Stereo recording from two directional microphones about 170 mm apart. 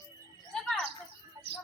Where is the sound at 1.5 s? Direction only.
70° right (ahead or behind).